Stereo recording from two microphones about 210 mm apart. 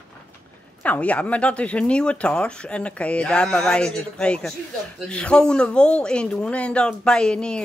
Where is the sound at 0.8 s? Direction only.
5° left (ahead or behind).